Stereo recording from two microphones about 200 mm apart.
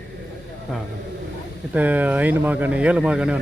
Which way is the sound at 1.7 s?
10° right (ahead or behind).